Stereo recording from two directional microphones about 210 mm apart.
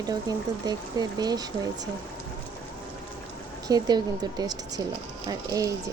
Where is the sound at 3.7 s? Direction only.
20° right (ahead or behind).